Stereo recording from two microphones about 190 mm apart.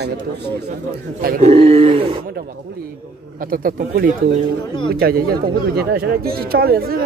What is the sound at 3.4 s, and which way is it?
Speech, 50° right (ahead or behind).